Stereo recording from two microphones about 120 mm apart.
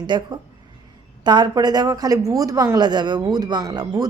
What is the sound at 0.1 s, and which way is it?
A woman's voice, 40° right (ahead or behind).